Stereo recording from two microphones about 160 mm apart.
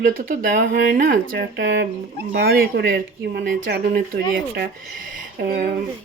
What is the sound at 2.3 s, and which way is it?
Speech, 70° right (ahead or behind).